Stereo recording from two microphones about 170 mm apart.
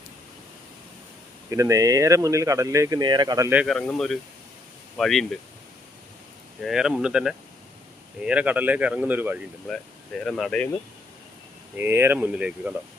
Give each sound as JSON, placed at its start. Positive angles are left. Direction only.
{"t": 1.5, "sound": "speech", "side_deg": -20}
{"t": 3.5, "sound": "speech", "side_deg": -5}
{"t": 6.7, "sound": "speech", "side_deg": -5}
{"t": 10.2, "sound": "speech", "side_deg": 0}
{"t": 11.8, "sound": "speech", "side_deg": -15}